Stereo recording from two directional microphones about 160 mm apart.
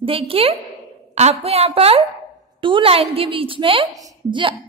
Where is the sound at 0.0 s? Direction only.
35° right (ahead or behind).